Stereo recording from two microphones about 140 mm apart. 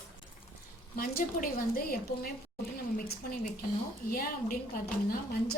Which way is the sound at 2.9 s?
90° left.